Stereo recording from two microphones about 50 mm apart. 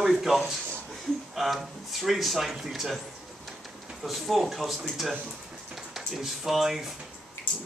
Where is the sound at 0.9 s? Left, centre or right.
Centre.